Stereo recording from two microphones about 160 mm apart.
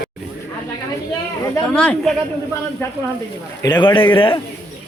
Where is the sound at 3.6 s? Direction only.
30° left (ahead or behind).